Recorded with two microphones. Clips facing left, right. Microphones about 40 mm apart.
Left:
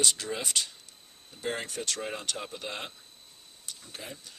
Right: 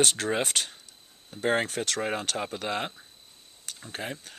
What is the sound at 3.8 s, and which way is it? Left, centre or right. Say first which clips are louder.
Speech: right 8 dB; right.